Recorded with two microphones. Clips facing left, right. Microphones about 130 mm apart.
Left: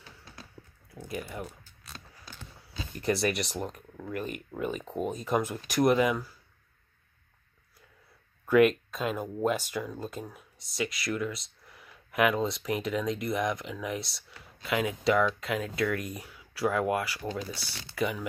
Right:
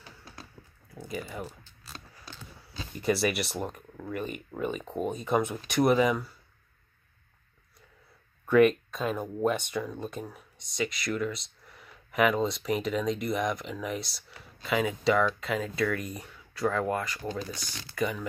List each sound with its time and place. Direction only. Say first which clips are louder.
1.3 s speech: right 1 dB; centre (ahead or behind)
3.0 s speech: right 1 dB; 5° right (ahead or behind)
8.5 s speech: right 1 dB; centre (ahead or behind)